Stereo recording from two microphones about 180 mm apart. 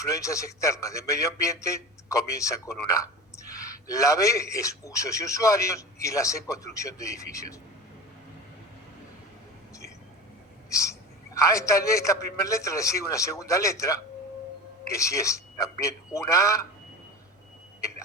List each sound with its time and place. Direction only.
0.0 s speech: 15° left (ahead or behind)
10.7 s a sound: 15° left (ahead or behind)
11.3 s speech: 15° left (ahead or behind)